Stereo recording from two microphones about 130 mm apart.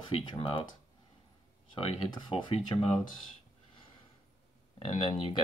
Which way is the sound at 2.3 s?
50° left (ahead or behind).